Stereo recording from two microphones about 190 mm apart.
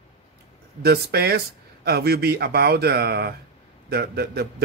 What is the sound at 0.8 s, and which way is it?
A man's voice, 55° right (ahead or behind).